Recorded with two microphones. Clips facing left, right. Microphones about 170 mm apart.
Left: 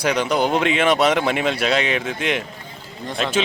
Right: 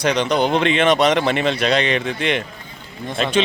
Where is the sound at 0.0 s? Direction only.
10° left (ahead or behind).